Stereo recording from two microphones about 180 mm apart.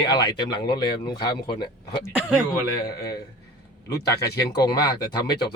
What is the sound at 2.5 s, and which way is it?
Speech, 20° left (ahead or behind).